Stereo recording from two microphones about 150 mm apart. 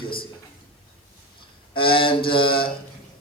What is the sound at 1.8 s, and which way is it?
Speech, 35° left (ahead or behind).